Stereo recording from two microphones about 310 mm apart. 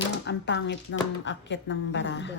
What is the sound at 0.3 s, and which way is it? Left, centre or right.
Speech, left.